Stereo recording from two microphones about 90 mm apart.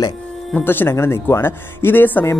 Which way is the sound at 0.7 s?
25° left (ahead or behind).